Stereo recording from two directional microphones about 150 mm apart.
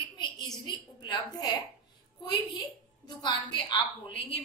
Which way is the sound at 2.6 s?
30° left (ahead or behind).